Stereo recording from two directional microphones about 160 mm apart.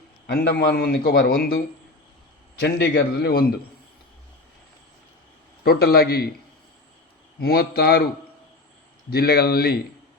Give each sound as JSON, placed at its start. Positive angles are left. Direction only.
{"t": 0.3, "sound": "a man's voice", "side_deg": 90}
{"t": 2.6, "sound": "a man's voice", "side_deg": 90}
{"t": 5.6, "sound": "a man's voice", "side_deg": 70}
{"t": 7.4, "sound": "a man's voice", "side_deg": 70}
{"t": 9.0, "sound": "a man's voice", "side_deg": 75}